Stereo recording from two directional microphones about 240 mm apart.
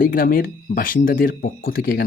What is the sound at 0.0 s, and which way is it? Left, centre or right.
Speech, left.